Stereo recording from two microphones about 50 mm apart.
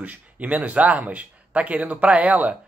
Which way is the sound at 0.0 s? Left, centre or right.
Right.